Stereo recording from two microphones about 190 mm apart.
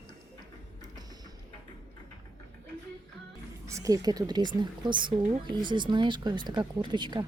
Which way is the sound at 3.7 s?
15° right (ahead or behind).